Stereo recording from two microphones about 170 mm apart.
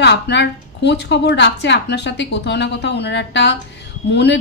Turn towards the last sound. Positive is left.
turn(degrees=90)